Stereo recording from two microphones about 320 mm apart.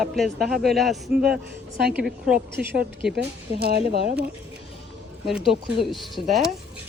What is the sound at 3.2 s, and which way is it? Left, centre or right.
Speech, right.